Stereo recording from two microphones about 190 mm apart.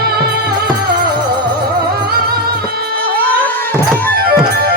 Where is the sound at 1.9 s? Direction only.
55° right (ahead or behind).